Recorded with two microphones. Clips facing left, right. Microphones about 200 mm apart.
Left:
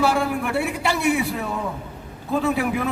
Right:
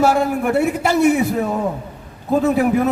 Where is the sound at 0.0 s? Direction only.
45° right (ahead or behind).